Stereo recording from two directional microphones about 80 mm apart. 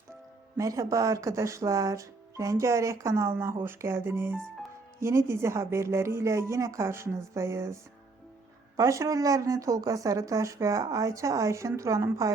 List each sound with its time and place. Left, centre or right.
0.5 s a woman's voice: right